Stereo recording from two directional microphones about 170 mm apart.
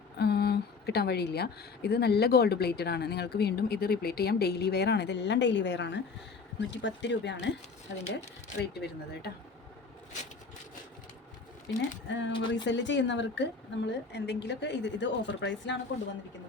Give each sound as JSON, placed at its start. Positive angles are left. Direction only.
{"t": 0.2, "sound": "a woman's voice", "side_deg": 70}
{"t": 8.6, "sound": "speech", "side_deg": 75}
{"t": 11.7, "sound": "a woman's voice", "side_deg": 90}
{"t": 12.3, "sound": "speech", "side_deg": 25}
{"t": 12.6, "sound": "a woman's voice", "side_deg": 90}